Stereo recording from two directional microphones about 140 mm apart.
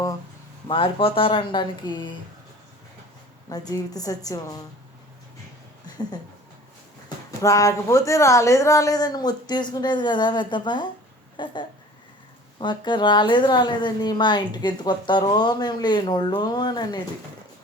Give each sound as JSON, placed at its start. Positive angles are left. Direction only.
{"t": 0.7, "sound": "a woman's voice", "side_deg": 40}
{"t": 3.5, "sound": "speech", "side_deg": 25}
{"t": 7.3, "sound": "a woman's voice", "side_deg": 25}
{"t": 12.5, "sound": "a woman's voice", "side_deg": 35}